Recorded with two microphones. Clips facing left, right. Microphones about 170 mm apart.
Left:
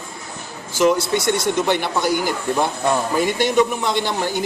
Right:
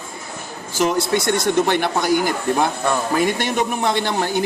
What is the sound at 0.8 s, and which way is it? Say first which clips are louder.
Speech: left 2 dB; 50° right (ahead or behind).